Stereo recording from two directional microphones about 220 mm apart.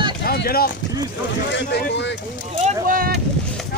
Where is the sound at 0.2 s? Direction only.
45° left (ahead or behind).